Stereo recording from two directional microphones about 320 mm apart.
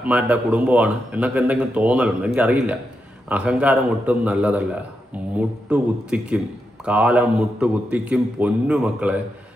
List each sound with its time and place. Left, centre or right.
0.0 s a man's voice: centre